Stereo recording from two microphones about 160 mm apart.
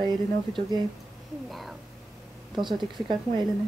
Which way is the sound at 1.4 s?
Centre (ahead or behind).